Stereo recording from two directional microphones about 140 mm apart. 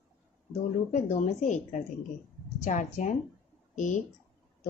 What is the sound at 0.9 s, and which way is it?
Speech, 60° left (ahead or behind).